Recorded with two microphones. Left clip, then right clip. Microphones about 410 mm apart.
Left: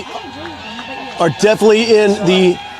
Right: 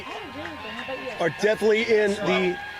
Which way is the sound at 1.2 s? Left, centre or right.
Left.